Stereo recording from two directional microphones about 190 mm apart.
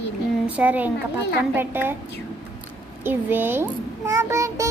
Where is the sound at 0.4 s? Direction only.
10° right (ahead or behind).